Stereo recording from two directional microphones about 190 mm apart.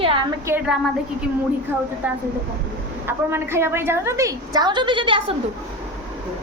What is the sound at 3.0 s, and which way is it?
A woman's voice, 15° right (ahead or behind).